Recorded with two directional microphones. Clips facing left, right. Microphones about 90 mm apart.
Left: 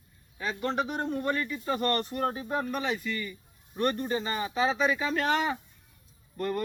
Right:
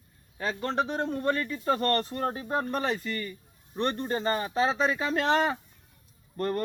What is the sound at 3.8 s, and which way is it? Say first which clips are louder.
Speech: left 1 dB; 30° right (ahead or behind).